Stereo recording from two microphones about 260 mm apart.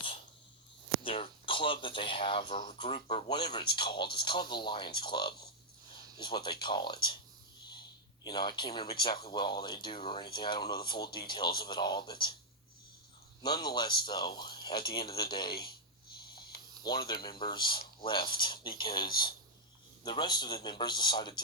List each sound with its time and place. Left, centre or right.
1.0 s speech: left
8.3 s speech: centre
13.7 s speech: centre
16.8 s speech: centre